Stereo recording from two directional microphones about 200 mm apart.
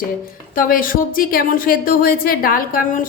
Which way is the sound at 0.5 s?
45° left (ahead or behind).